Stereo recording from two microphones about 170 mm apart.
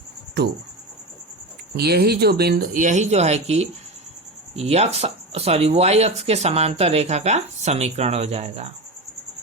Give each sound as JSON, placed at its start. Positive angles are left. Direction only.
{"t": 1.7, "sound": "speech", "side_deg": -70}